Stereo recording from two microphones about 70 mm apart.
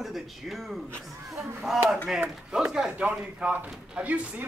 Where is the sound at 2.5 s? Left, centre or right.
Centre.